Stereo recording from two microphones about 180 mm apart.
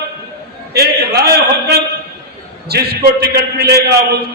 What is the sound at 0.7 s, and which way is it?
A man's voice, 65° right (ahead or behind).